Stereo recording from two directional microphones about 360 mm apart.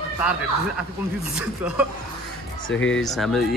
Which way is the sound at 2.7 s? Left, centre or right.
Left.